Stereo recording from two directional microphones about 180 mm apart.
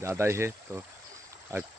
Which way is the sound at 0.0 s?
15° right (ahead or behind).